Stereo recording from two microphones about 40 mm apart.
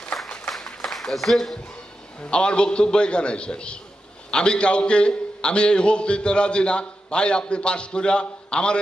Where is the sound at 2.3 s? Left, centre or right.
Left.